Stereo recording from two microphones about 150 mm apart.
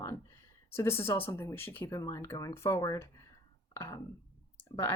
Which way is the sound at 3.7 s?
20° left (ahead or behind).